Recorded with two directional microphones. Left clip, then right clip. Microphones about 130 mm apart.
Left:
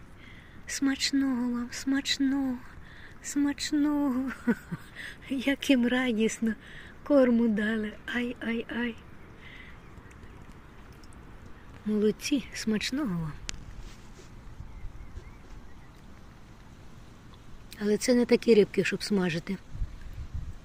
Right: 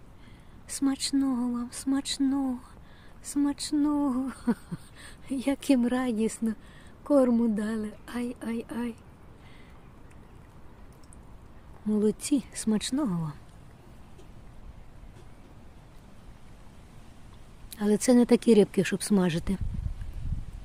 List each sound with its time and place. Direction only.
0.9 s female singing: 15° right (ahead or behind)
3.3 s speech: 10° right (ahead or behind)
11.9 s speech: 30° right (ahead or behind)
13.0 s female singing: 15° right (ahead or behind)
17.7 s speech: 50° right (ahead or behind)